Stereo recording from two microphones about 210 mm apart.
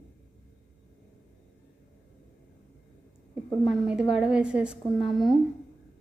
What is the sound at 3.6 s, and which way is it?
A woman's voice, centre (ahead or behind).